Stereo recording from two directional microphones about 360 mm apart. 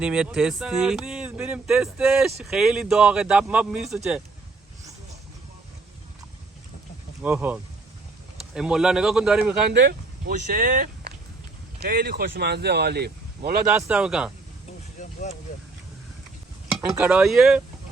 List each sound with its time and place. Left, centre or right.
0.0 s speech: centre
7.2 s speech: centre
9.7 s speech: right
13.8 s speech: centre
16.6 s speech: centre